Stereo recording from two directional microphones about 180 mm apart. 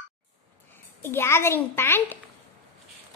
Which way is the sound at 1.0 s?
10° left (ahead or behind).